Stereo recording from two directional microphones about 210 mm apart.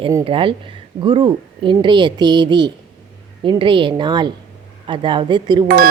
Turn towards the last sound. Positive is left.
turn(degrees=-20)  # may be behind; listen again after turning